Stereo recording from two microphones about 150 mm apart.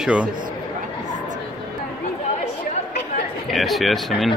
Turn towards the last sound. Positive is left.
turn(degrees=0)  # may be behind; listen again after turning